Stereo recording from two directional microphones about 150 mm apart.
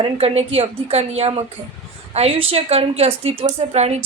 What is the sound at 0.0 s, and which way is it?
A woman's voice, 40° right (ahead or behind).